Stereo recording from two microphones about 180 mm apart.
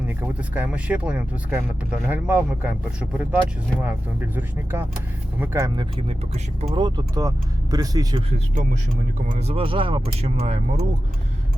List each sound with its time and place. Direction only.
0.1 s speech: 10° right (ahead or behind); by 6.7 s 35° right (ahead or behind)
6.7 s speech: 25° right (ahead or behind)
9.3 s speech: 35° right (ahead or behind)